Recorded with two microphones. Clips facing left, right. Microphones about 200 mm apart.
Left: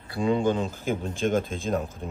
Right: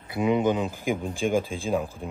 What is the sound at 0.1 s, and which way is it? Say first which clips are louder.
A man's voice: right 1 dB; 20° right (ahead or behind).